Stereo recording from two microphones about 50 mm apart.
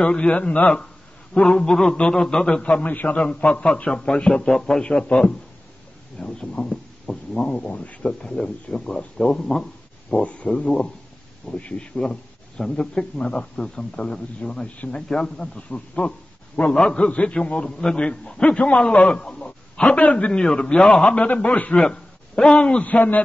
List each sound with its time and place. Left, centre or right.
0.0 s a man's voice: left
2.5 s a man's voice: left
3.2 s a man's voice: centre
8.1 s speech: centre
10.1 s a man's voice: left
20.3 s a man's voice: centre
21.7 s a man's voice: centre; by 23.2 s left